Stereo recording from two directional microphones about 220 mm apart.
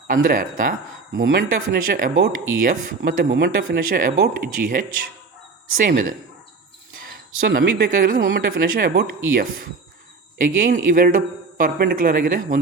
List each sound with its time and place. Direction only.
0.1 s speech: 40° right (ahead or behind)
7.4 s speech: 40° right (ahead or behind)